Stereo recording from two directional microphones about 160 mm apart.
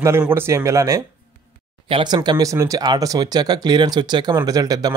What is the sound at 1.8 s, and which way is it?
Speech, 30° right (ahead or behind).